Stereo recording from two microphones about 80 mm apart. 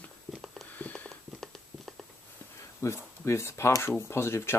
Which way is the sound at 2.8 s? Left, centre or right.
Left.